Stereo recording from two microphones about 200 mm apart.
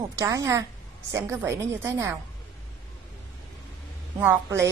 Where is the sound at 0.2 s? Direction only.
15° right (ahead or behind).